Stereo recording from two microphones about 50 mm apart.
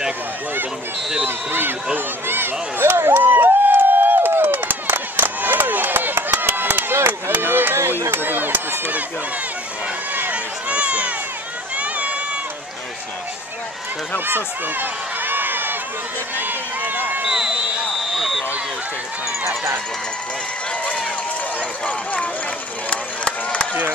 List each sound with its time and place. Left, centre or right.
1.2 s speech: right
2.2 s a sound: right
5.4 s a sound: right
7.1 s run: right
8.1 s a sound: right
10.3 s a sound: right
11.7 s run: right
14.2 s run: right
16.3 s speech: right
17.2 s speech: centre
18.1 s speech: centre
19.4 s speech: right
21.8 s speech: left
22.8 s run: left